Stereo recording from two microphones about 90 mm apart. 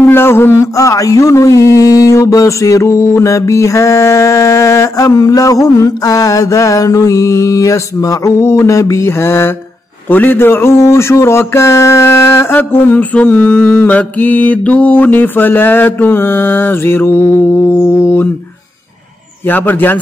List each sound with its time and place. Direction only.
0.0 s mantra: 25° left (ahead or behind)
8.3 s speech: 30° left (ahead or behind)
19.4 s speech: 20° left (ahead or behind)